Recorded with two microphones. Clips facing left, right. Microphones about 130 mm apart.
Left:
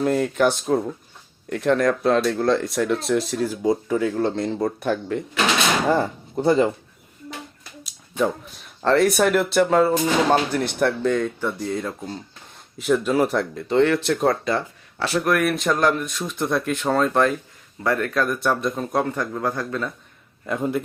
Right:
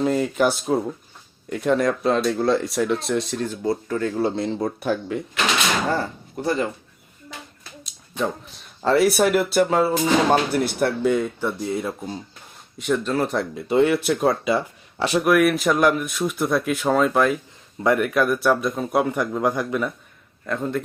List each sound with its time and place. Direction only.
0.0 s speech: centre (ahead or behind)
4.1 s speech: 5° right (ahead or behind)
5.9 s speech: 25° left (ahead or behind)
7.9 s a sound: 5° left (ahead or behind)
8.8 s speech: 5° right (ahead or behind)
12.8 s speech: 5° left (ahead or behind); by 15.3 s 15° right (ahead or behind)
15.3 s speech: 5° right (ahead or behind)
20.5 s speech: 10° left (ahead or behind)